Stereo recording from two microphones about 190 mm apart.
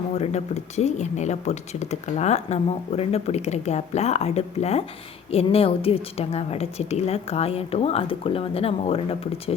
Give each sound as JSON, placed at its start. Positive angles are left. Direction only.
{"t": 0.2, "sound": "speech", "side_deg": 35}